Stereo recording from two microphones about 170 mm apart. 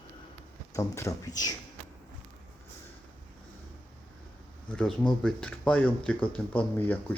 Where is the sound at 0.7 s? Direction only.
20° left (ahead or behind).